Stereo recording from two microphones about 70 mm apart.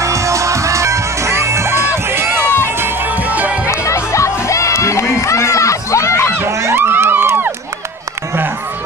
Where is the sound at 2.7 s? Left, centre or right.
Right.